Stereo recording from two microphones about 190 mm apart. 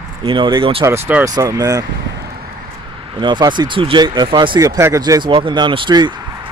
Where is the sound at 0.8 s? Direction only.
15° right (ahead or behind).